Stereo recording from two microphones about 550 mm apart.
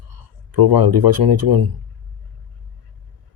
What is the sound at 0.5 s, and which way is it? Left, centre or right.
Speech, right.